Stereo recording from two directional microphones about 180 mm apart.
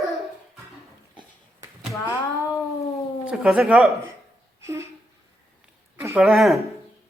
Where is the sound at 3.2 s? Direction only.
5° right (ahead or behind).